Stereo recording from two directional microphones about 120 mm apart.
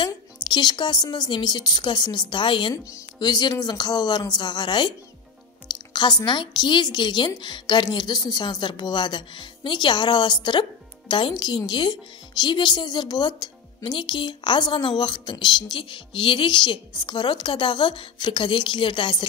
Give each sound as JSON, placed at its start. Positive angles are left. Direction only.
{"t": 0.0, "sound": "a woman's voice", "side_deg": 40}
{"t": 5.9, "sound": "a woman's voice", "side_deg": 40}